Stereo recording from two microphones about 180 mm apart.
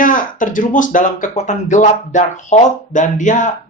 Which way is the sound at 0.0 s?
50° left (ahead or behind).